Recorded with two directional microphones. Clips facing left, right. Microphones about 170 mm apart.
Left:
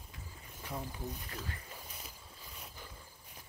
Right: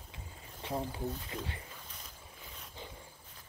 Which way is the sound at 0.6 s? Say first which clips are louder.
Right 6 dB; 25° right (ahead or behind).